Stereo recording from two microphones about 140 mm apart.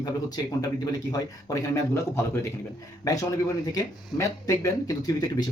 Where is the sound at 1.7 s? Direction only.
20° left (ahead or behind).